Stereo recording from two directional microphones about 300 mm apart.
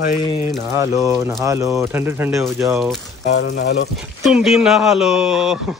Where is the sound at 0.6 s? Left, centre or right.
Centre.